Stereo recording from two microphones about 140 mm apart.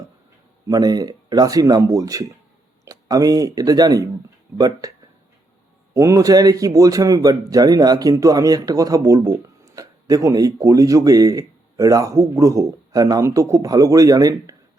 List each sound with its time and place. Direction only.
0.7 s speech: 25° right (ahead or behind)
5.9 s speech: 25° right (ahead or behind)